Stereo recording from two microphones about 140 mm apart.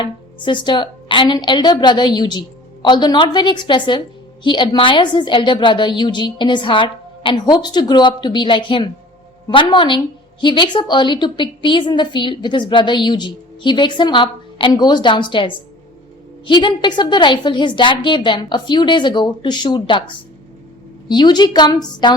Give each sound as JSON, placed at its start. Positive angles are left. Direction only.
{"t": 0.0, "sound": "a woman's voice", "side_deg": 35}
{"t": 21.1, "sound": "a woman's voice", "side_deg": 30}